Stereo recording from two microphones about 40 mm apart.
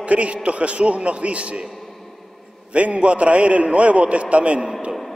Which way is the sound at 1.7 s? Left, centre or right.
Centre.